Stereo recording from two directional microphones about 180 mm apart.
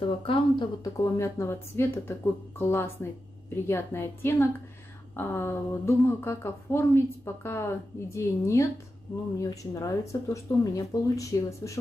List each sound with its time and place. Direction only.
0.2 s speech: 30° left (ahead or behind)